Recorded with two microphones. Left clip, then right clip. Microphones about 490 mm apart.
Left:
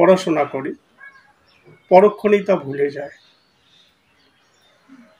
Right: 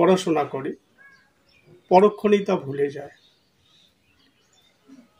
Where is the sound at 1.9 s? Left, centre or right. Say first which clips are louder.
Left 5 dB; right.